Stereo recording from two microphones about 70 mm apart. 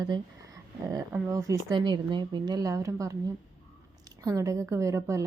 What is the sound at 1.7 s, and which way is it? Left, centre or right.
A woman's voice, right.